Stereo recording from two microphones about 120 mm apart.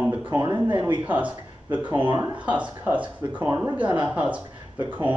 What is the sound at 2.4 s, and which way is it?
Speech, 10° right (ahead or behind).